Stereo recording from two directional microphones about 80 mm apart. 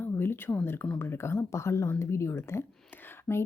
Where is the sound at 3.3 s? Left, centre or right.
Centre.